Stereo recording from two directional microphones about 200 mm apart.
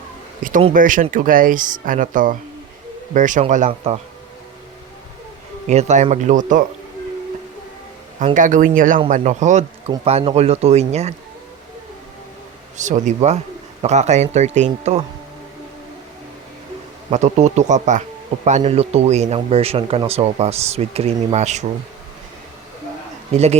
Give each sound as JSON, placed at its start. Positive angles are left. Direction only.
{"t": 0.7, "sound": "a man's voice", "side_deg": -40}
{"t": 5.6, "sound": "a man's voice", "side_deg": -35}
{"t": 8.2, "sound": "a man's voice", "side_deg": -40}
{"t": 12.7, "sound": "a man's voice", "side_deg": -35}
{"t": 17.1, "sound": "a man's voice", "side_deg": -35}